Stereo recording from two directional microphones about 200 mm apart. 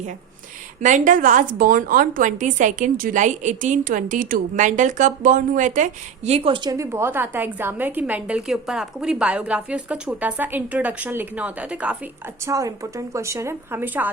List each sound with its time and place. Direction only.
0.8 s a woman's voice: 40° right (ahead or behind); by 11.9 s 5° right (ahead or behind)
12.5 s a woman's voice: 15° right (ahead or behind)